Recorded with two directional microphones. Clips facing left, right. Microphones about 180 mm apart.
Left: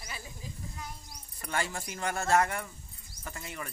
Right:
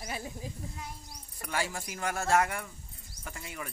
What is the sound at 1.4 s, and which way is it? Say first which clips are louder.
Speech: even; 5° right (ahead or behind).